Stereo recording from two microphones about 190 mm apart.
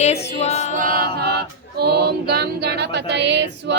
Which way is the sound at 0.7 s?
45° right (ahead or behind).